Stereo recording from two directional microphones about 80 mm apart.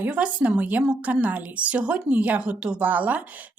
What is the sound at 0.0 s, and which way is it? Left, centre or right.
Speech, centre.